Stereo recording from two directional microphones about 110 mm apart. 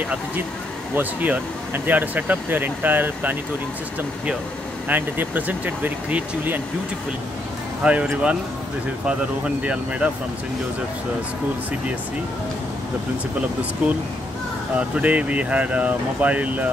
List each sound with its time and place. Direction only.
0.9 s speech: 15° right (ahead or behind)
4.8 s speech: 20° right (ahead or behind)
7.8 s speech: 10° right (ahead or behind)
9.6 s speech: 10° right (ahead or behind)
14.8 s speech: 10° right (ahead or behind)